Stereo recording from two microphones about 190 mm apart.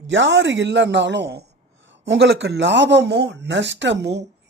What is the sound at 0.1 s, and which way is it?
A woman's voice, 65° right (ahead or behind).